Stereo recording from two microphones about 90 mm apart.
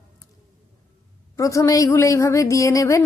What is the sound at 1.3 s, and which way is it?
Speech, 35° left (ahead or behind).